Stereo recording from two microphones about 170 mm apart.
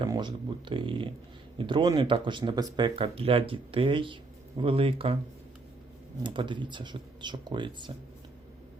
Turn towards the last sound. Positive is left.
turn(degrees=-30)  # may be behind; listen again after turning